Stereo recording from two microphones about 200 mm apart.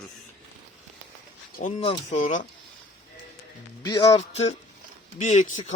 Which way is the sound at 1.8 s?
30° left (ahead or behind).